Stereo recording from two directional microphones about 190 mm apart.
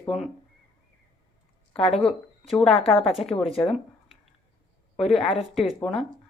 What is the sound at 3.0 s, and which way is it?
Speech, centre (ahead or behind).